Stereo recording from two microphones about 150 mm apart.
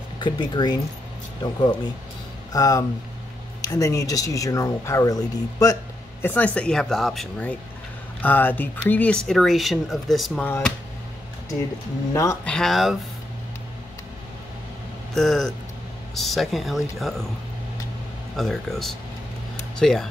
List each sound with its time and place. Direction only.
0.2 s speech: 30° left (ahead or behind)
2.5 s speech: 25° left (ahead or behind)
6.2 s speech: 10° left (ahead or behind)
10.4 s speech: 10° left (ahead or behind)
12.1 s speech: 20° left (ahead or behind)
12.4 s speech: 5° left (ahead or behind)
15.1 s speech: centre (ahead or behind)
18.3 s speech: centre (ahead or behind)